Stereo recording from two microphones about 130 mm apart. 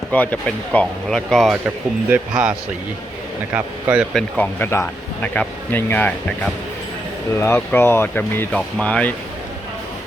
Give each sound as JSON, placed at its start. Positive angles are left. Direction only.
{"t": 0.1, "sound": "speech", "side_deg": 10}
{"t": 2.0, "sound": "speech", "side_deg": -10}
{"t": 4.1, "sound": "speech", "side_deg": 10}